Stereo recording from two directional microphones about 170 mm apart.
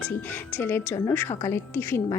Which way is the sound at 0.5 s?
10° left (ahead or behind).